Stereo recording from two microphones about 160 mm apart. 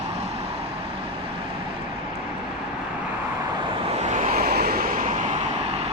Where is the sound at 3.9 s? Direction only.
45° right (ahead or behind).